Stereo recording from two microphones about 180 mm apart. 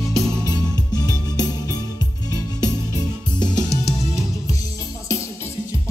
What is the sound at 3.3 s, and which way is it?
Music, 25° left (ahead or behind).